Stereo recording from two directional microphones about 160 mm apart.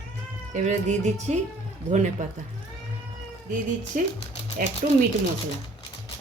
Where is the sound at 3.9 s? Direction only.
55° right (ahead or behind).